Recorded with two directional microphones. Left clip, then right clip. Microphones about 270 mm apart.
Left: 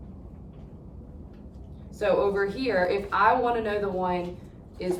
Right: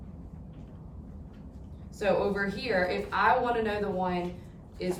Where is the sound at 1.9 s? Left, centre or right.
Centre.